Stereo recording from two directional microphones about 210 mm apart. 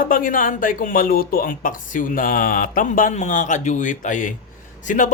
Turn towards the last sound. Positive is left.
turn(degrees=35)  # may be behind; listen again after turning